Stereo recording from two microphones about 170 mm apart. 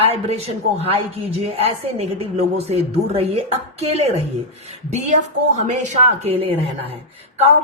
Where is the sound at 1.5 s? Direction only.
35° right (ahead or behind).